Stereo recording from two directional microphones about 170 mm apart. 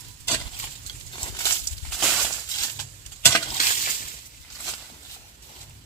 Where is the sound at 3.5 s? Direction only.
45° left (ahead or behind).